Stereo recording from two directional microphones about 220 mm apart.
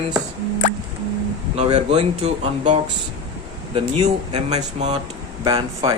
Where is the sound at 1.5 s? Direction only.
30° right (ahead or behind).